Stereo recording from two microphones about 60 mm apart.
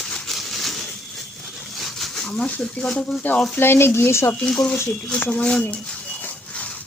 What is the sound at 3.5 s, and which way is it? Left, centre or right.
Speech, left.